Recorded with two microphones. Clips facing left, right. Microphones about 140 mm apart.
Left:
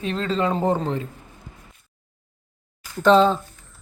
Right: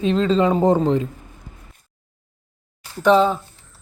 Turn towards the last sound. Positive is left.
turn(degrees=-10)  # may be behind; listen again after turning